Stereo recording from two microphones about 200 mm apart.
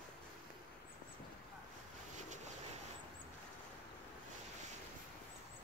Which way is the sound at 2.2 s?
35° right (ahead or behind).